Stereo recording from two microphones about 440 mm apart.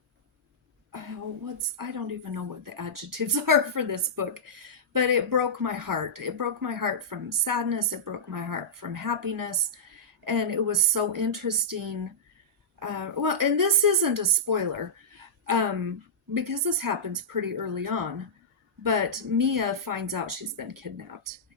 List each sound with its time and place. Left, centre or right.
0.9 s a woman's voice: right